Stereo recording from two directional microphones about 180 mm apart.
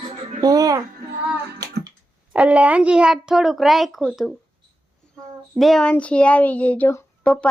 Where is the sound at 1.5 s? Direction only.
20° right (ahead or behind).